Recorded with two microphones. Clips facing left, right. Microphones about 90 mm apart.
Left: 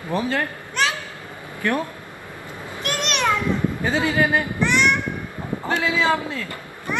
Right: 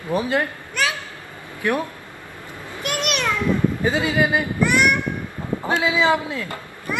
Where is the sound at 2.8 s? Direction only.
15° right (ahead or behind).